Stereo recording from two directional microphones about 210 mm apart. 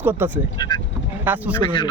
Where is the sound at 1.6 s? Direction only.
25° left (ahead or behind).